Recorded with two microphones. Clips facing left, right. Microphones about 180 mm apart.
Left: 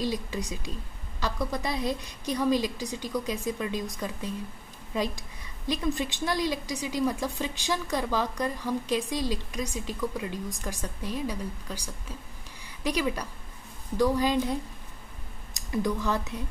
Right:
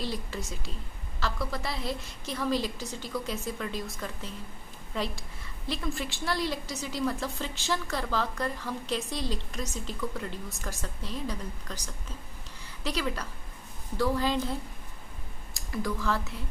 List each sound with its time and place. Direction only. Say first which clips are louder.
0.0 s a woman's voice: left 4 dB; 15° left (ahead or behind)